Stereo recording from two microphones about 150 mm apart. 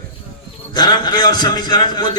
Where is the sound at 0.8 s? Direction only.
25° left (ahead or behind).